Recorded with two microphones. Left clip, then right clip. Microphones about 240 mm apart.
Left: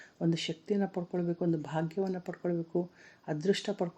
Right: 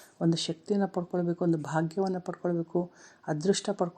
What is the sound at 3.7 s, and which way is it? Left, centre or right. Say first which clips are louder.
Speech: right 4 dB; centre.